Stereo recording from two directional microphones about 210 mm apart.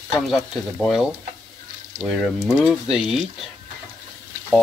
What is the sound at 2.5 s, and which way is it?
Speech, 5° right (ahead or behind).